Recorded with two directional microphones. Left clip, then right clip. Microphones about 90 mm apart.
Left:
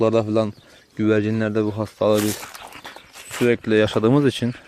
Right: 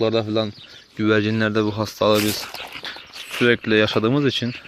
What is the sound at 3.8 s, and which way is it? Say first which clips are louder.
Speech: left 1 dB; 75° left (ahead or behind).